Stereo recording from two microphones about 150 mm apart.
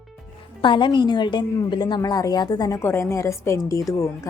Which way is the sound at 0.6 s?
30° left (ahead or behind).